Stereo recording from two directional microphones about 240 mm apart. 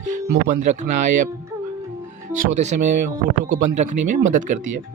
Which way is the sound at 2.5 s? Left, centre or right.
Right.